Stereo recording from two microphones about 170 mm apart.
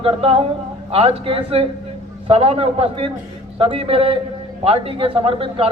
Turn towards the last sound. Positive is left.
turn(degrees=-30)  # may be behind; listen again after turning